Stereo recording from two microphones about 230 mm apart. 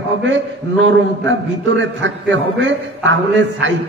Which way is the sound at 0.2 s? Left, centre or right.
Right.